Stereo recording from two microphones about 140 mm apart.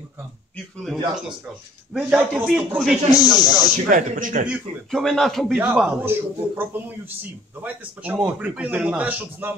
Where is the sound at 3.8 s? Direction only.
75° right (ahead or behind).